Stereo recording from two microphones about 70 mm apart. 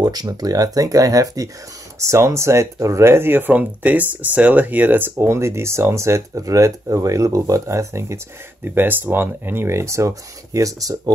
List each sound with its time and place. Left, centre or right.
0.0 s speech: right
2.0 s speech: right
5.2 s speech: right
8.6 s speech: right